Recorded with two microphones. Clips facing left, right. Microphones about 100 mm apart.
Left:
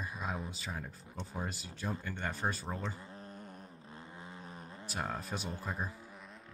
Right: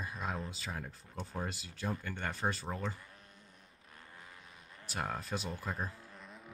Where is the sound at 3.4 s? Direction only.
50° left (ahead or behind).